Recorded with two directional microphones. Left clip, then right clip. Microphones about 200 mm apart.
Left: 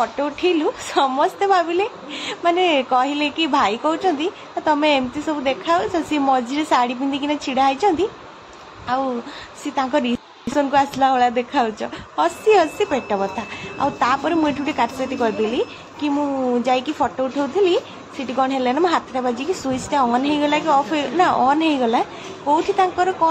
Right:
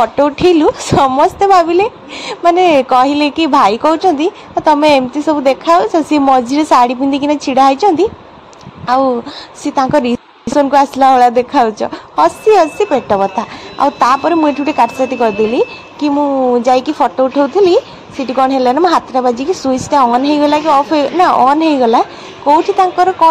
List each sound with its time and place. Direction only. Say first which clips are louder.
0.0 s a woman's voice: right 10 dB; 35° right (ahead or behind)
9.8 s a sound: right 8 dB; 30° right (ahead or behind)
10.7 s a woman's voice: right 8 dB; 30° right (ahead or behind)